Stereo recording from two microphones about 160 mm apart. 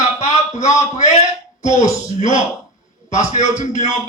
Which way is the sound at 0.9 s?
45° left (ahead or behind).